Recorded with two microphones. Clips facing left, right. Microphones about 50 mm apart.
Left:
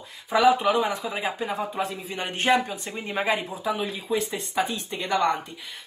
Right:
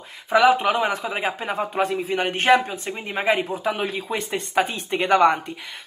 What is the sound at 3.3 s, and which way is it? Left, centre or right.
Speech, right.